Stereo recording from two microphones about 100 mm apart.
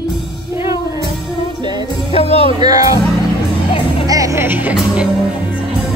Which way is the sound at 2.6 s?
40° right (ahead or behind).